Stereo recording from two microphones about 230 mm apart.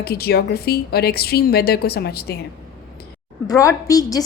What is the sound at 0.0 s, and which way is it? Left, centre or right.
A woman's voice, left.